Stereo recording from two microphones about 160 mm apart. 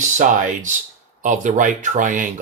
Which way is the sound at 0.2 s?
55° right (ahead or behind).